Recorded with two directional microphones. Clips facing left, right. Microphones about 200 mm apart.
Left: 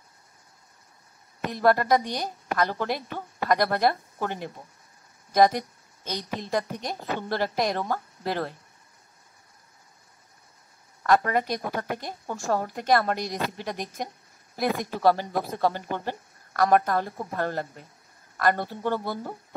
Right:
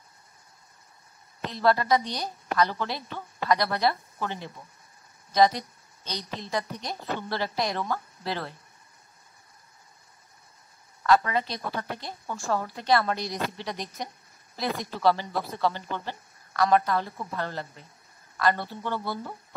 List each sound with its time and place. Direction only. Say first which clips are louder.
1.4 s a woman's voice: left 2 dB; 50° left (ahead or behind)
5.3 s a sound: left 2 dB; 50° left (ahead or behind)
6.5 s a woman's voice: left 3 dB; 45° left (ahead or behind)
11.0 s a woman's voice: left 1 dB; 50° left (ahead or behind)